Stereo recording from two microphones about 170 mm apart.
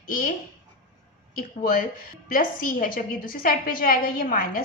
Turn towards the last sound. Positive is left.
turn(degrees=60)  # may be behind; listen again after turning